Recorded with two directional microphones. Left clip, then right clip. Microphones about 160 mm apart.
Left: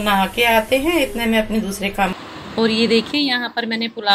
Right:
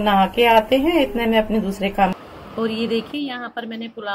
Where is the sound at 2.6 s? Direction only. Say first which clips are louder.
Left 6 dB; 50° left (ahead or behind).